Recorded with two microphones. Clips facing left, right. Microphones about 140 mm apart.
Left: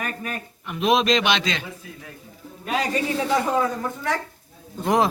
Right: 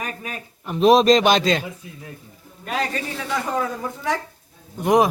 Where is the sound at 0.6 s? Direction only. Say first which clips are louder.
Right 6 dB; 35° right (ahead or behind).